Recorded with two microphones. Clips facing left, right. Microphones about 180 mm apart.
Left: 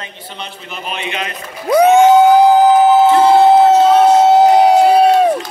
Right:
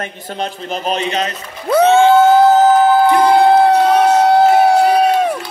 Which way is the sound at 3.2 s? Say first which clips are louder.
Left 1 dB; 20° left (ahead or behind).